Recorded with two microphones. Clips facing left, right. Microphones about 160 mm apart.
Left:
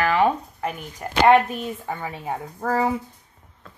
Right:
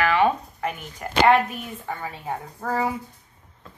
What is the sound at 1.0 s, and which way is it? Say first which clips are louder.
Speech: left 2 dB; 25° left (ahead or behind).